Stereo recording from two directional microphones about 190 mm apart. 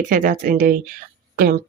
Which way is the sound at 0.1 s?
45° right (ahead or behind).